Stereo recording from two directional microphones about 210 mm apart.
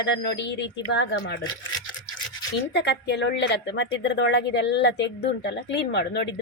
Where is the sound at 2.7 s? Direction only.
55° left (ahead or behind).